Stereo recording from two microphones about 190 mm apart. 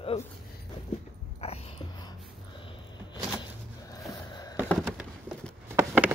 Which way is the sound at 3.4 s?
20° left (ahead or behind).